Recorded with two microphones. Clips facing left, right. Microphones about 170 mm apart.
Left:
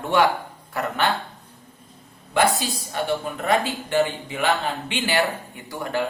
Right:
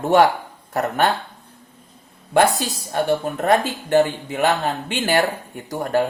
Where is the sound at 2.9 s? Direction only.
45° right (ahead or behind).